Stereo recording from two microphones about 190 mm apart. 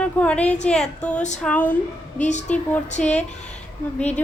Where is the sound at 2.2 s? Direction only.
40° left (ahead or behind).